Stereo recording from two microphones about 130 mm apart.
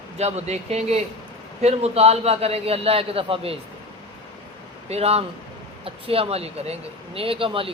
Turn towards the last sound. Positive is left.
turn(degrees=-45)  # may be behind; listen again after turning